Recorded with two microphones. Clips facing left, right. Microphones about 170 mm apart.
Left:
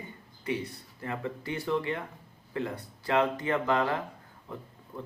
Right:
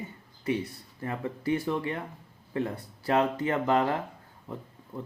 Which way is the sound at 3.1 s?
30° right (ahead or behind).